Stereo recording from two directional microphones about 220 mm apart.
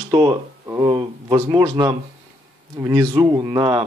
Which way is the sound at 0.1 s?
20° right (ahead or behind).